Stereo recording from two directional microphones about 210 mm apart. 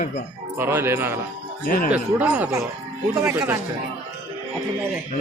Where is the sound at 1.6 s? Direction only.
45° left (ahead or behind).